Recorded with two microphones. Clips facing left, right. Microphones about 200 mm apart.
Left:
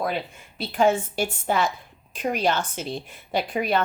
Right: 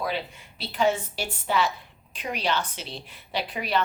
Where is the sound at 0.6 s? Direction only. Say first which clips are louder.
Left 4 dB; 50° left (ahead or behind).